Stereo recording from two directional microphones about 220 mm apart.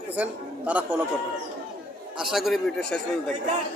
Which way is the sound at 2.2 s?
Centre (ahead or behind).